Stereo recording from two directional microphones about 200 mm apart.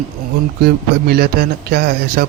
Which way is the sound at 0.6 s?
55° right (ahead or behind).